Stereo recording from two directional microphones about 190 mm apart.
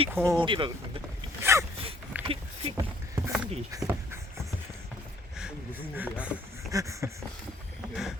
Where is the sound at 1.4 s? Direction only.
15° right (ahead or behind).